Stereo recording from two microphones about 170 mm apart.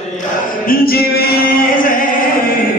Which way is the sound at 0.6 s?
60° left (ahead or behind).